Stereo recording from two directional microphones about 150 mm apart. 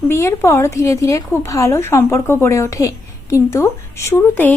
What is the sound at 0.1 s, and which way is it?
Speech, 20° left (ahead or behind).